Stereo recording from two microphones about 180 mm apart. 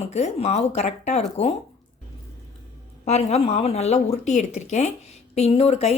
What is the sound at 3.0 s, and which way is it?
Speech, 35° left (ahead or behind).